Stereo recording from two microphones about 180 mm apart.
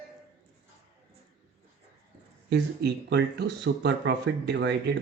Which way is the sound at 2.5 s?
70° right (ahead or behind).